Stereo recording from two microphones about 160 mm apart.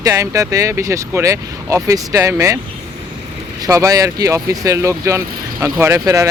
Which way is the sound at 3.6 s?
20° right (ahead or behind).